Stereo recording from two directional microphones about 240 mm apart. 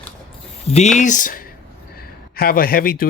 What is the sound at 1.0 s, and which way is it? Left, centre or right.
Speech, left.